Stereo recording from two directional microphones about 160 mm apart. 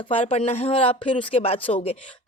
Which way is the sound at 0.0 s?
35° left (ahead or behind).